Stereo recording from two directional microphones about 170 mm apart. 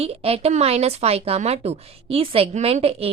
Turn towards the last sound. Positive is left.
turn(degrees=-35)  # may be behind; listen again after turning